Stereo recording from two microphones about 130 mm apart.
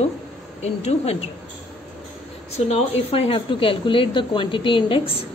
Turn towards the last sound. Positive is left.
turn(degrees=40)  # may be behind; listen again after turning